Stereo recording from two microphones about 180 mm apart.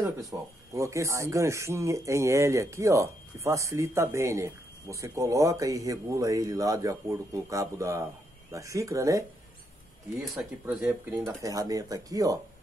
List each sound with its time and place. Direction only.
0.0 s speech: 15° right (ahead or behind)
10.3 s speech: 10° right (ahead or behind)